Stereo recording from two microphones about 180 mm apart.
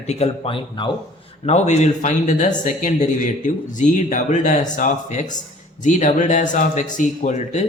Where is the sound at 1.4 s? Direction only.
40° left (ahead or behind).